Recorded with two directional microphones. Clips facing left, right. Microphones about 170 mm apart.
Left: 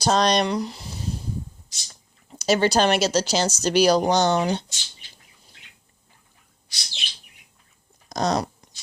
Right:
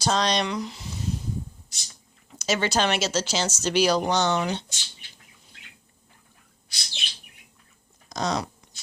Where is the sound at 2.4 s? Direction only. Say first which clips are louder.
Left 5 dB; 35° left (ahead or behind).